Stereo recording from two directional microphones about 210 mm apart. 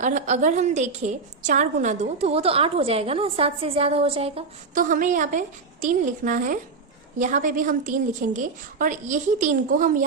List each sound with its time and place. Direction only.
0.0 s a woman's voice: 35° right (ahead or behind)